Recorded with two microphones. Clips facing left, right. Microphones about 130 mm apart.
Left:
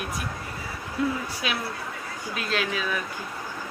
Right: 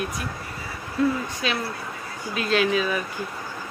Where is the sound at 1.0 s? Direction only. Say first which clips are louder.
Right 4 dB; 15° left (ahead or behind).